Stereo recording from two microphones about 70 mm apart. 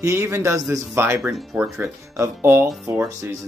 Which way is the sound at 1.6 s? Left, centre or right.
Right.